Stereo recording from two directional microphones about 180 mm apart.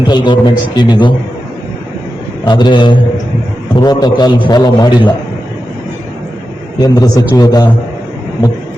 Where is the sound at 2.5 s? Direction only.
25° left (ahead or behind).